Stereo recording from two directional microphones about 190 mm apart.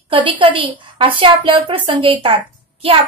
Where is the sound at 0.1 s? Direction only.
25° right (ahead or behind).